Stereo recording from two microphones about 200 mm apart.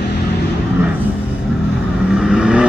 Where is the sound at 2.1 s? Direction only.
5° right (ahead or behind).